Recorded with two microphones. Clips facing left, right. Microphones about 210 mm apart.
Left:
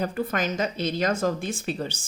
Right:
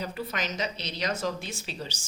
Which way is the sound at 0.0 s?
50° left (ahead or behind).